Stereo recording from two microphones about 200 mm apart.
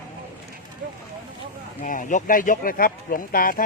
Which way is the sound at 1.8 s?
40° left (ahead or behind).